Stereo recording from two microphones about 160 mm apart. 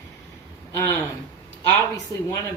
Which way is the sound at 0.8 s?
15° left (ahead or behind).